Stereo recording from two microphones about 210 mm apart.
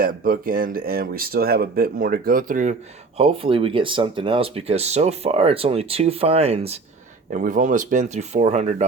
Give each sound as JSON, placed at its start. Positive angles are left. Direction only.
{"t": 0.0, "sound": "speech", "side_deg": -40}
{"t": 3.2, "sound": "speech", "side_deg": -25}